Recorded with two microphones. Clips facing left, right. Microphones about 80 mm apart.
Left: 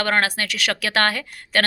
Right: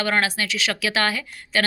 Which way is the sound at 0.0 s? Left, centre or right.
Left.